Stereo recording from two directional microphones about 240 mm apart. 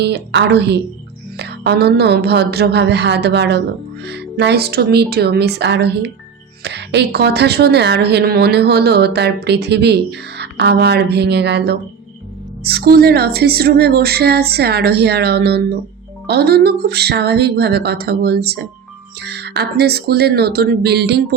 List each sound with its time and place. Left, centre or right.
0.0 s a woman's voice: right